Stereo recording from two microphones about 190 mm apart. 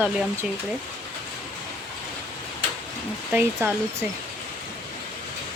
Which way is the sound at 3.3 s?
10° right (ahead or behind).